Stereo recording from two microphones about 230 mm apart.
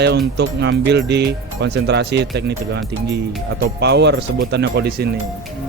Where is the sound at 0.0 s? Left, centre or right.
Right.